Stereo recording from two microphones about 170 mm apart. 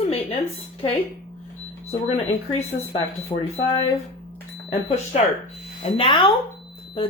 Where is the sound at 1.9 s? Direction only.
40° left (ahead or behind).